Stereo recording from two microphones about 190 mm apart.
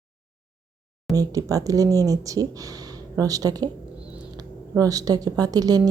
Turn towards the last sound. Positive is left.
turn(degrees=-20)  # may be behind; listen again after turning